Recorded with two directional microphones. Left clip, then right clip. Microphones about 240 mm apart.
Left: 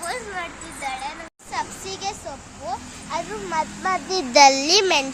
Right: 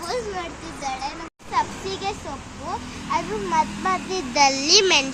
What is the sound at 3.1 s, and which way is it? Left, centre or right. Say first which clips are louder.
A child's voice: right 3 dB; left.